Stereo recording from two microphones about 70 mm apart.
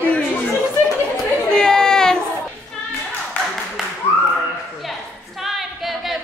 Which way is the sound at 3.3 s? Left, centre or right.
Left.